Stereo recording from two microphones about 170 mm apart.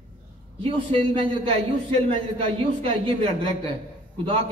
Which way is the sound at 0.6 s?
30° right (ahead or behind).